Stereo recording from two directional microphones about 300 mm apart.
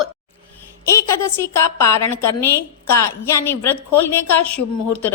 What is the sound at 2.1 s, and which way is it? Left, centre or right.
Speech, left.